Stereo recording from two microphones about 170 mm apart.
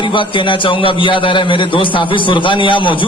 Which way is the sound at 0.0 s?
30° left (ahead or behind).